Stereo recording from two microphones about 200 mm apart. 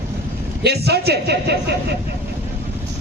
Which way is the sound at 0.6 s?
55° right (ahead or behind).